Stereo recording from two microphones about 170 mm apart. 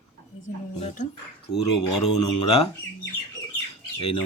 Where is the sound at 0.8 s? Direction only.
45° left (ahead or behind).